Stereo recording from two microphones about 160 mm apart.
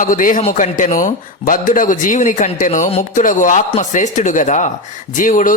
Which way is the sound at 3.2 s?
55° left (ahead or behind).